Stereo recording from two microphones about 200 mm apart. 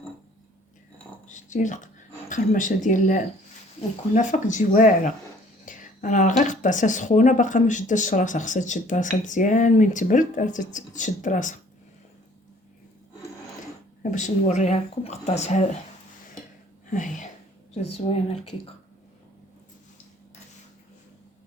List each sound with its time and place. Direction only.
1.3 s speech: 40° left (ahead or behind)
14.0 s speech: 40° left (ahead or behind)
16.9 s speech: 40° left (ahead or behind)